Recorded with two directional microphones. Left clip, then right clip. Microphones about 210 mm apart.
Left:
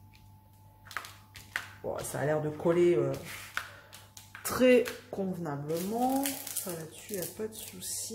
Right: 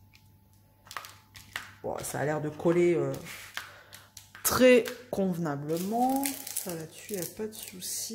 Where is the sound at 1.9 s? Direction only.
40° right (ahead or behind).